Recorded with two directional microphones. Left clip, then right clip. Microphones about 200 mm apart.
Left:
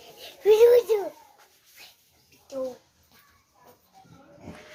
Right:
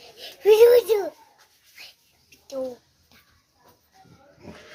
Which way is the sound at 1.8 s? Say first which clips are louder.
Right 5 dB; 55° right (ahead or behind).